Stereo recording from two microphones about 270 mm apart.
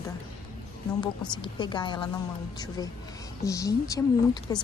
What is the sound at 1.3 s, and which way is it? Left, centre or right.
Speech, centre.